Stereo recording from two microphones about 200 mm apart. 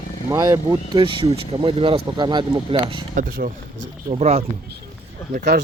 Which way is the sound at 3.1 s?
45° right (ahead or behind).